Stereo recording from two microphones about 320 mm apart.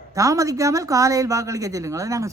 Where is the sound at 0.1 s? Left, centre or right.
Centre.